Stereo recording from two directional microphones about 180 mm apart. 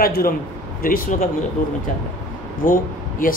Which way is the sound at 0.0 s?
55° left (ahead or behind).